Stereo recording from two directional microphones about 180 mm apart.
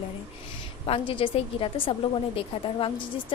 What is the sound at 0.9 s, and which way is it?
A woman's voice, 30° left (ahead or behind).